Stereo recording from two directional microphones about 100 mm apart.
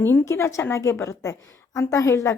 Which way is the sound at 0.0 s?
25° left (ahead or behind).